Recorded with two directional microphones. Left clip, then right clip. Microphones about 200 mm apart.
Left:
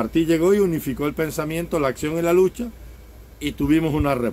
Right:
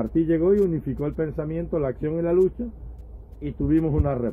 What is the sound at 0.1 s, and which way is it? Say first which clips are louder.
Speech: left 2 dB; 10° left (ahead or behind).